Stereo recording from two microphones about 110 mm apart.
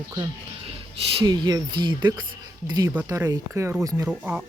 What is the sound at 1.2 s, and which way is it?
Speech, 40° right (ahead or behind).